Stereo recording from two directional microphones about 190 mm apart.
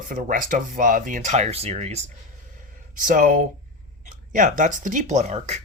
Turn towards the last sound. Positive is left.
turn(degrees=-35)  # may be behind; listen again after turning